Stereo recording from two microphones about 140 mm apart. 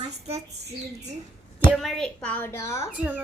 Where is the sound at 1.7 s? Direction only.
Centre (ahead or behind).